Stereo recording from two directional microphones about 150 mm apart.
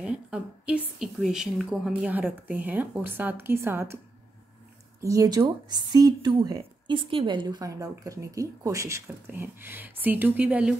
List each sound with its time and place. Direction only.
0.0 s a woman's voice: 5° right (ahead or behind)
5.0 s a woman's voice: 20° right (ahead or behind)